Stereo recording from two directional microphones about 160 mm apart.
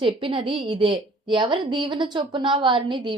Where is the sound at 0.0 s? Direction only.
35° right (ahead or behind).